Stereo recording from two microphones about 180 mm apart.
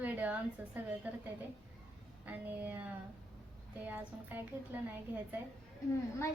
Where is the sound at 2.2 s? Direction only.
10° right (ahead or behind).